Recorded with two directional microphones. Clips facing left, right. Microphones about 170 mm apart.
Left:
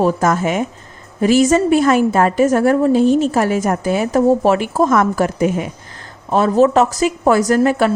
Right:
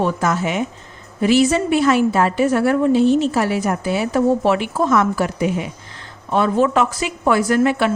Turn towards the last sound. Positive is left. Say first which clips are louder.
# left 3 dB
turn(degrees=40)  # may be behind; listen again after turning